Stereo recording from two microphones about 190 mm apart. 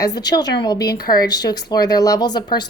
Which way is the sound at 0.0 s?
20° left (ahead or behind).